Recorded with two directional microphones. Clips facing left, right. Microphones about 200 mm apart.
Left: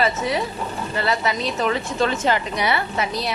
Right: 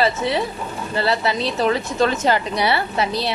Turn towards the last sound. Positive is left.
turn(degrees=-30)  # may be behind; listen again after turning